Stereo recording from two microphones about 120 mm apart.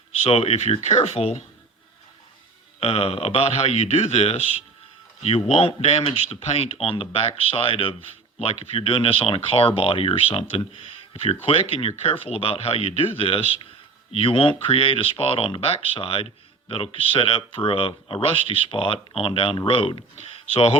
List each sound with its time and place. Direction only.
0.3 s speech: 60° left (ahead or behind)
2.8 s speech: 55° left (ahead or behind)